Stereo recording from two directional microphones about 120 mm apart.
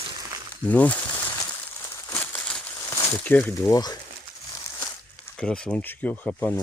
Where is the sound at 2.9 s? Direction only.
20° left (ahead or behind).